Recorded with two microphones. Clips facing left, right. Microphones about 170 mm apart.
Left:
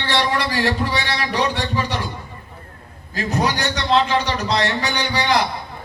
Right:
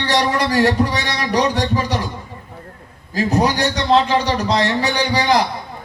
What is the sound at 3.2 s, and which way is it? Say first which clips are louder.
Speech: right 4 dB; 35° right (ahead or behind).